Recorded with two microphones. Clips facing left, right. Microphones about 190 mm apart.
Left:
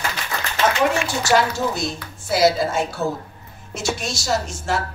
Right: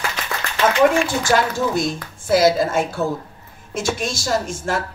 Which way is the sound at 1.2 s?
50° right (ahead or behind).